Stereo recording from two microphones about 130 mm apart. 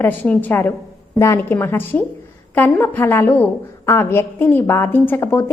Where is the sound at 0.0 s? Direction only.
15° left (ahead or behind).